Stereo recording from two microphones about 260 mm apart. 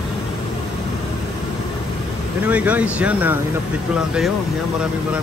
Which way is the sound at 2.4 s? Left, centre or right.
Centre.